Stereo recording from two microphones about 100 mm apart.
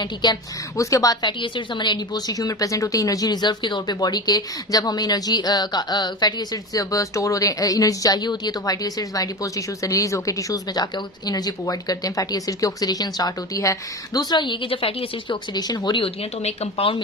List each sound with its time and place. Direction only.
0.0 s speech: 45° left (ahead or behind)
0.8 s speech: 35° left (ahead or behind); by 15.4 s 65° left (ahead or behind)
15.5 s speech: 40° left (ahead or behind)
16.0 s speech: 75° left (ahead or behind)